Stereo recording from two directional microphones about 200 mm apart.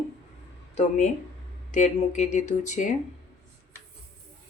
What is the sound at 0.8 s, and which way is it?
Speech, 35° left (ahead or behind).